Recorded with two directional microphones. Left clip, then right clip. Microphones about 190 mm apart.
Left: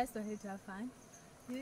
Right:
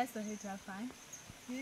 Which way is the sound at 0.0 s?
25° left (ahead or behind).